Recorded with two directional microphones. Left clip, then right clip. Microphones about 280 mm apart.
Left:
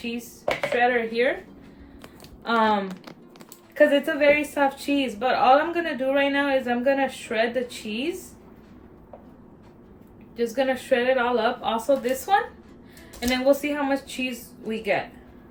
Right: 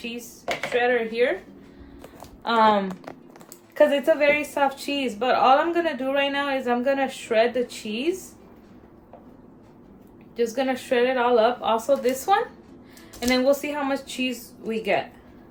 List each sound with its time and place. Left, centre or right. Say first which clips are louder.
0.8 s speech: right 1 dB; centre
2.4 s speech: right 3 dB; centre
3.8 s a woman's voice: right 1 dB; centre
10.3 s a woman's voice: even; centre